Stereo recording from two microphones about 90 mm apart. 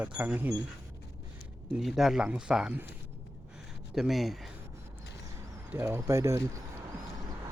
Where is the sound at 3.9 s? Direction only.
Centre (ahead or behind).